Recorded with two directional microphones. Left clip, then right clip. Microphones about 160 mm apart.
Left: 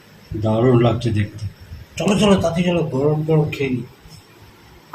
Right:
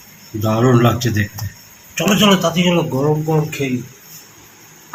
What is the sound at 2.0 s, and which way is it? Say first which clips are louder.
Speech: right 3 dB; 35° right (ahead or behind).